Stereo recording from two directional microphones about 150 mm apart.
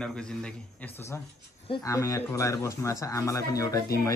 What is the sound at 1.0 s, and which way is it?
A man's voice, 15° left (ahead or behind).